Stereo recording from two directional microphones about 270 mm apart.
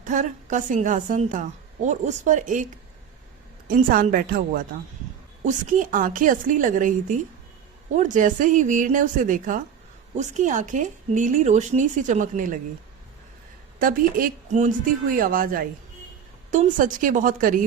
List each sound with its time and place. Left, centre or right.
0.0 s a woman's voice: right
13.7 s a woman's voice: right